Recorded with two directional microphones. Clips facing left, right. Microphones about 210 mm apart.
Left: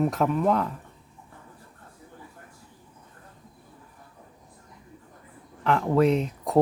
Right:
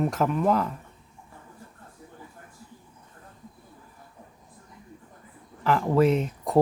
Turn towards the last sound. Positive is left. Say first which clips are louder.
# even
turn(degrees=0)  # may be behind; listen again after turning